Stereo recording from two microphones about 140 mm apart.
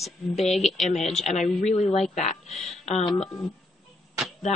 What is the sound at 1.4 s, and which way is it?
A woman's voice, 55° left (ahead or behind).